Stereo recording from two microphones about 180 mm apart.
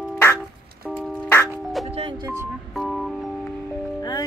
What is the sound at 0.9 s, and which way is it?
Music, centre (ahead or behind).